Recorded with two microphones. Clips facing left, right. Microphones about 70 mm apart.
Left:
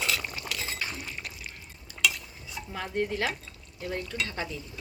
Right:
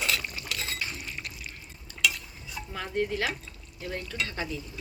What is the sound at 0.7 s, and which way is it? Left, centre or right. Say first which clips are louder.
Liquid: left 1 dB; left.